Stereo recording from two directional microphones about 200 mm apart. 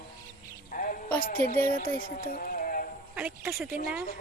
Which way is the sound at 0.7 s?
45° left (ahead or behind).